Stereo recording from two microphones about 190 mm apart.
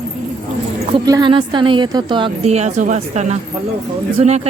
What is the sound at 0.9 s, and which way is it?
A woman's voice, 20° right (ahead or behind).